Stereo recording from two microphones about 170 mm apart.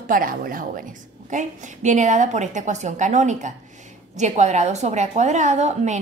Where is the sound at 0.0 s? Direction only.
55° right (ahead or behind).